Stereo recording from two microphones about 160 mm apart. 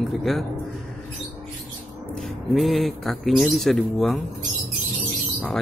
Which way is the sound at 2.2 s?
Centre (ahead or behind).